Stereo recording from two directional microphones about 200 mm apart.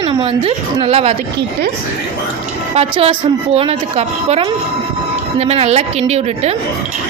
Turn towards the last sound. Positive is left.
turn(degrees=-30)  # may be behind; listen again after turning